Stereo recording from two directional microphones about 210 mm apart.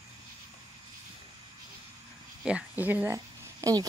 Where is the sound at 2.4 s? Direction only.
5° right (ahead or behind).